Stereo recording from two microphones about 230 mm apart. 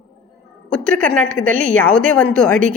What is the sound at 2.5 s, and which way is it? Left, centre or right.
Speech, right.